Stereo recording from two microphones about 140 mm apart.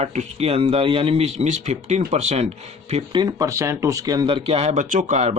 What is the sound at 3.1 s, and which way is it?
Speech, 25° right (ahead or behind).